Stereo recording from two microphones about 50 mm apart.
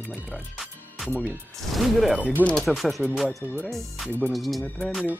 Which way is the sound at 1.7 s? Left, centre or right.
Centre.